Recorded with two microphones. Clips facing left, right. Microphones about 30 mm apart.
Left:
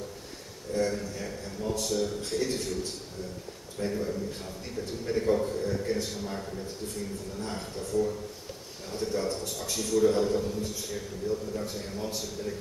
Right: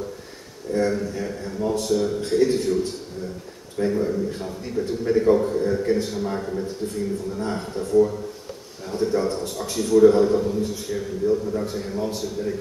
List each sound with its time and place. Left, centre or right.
0.7 s a man's voice: right